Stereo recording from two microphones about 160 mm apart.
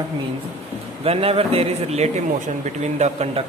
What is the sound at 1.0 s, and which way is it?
A man's voice, 35° right (ahead or behind).